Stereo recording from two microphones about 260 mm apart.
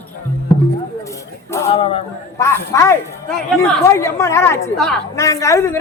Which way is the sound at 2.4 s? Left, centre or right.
Centre.